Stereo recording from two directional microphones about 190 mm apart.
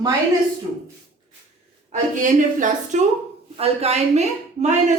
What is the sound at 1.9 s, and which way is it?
Speech, 40° right (ahead or behind).